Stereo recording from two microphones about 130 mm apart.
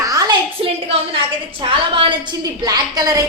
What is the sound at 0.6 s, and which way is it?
A woman's voice, 45° right (ahead or behind).